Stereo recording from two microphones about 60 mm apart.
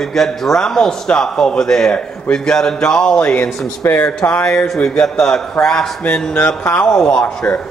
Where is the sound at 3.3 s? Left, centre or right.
Left.